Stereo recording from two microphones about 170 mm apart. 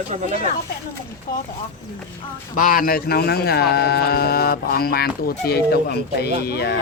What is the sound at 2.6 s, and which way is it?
Speech, 55° left (ahead or behind).